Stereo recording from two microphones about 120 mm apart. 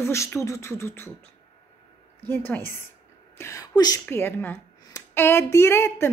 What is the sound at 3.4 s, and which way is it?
Speech, 30° left (ahead or behind).